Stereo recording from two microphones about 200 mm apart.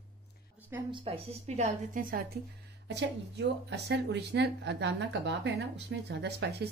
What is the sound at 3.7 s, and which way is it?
A woman's voice, 55° right (ahead or behind).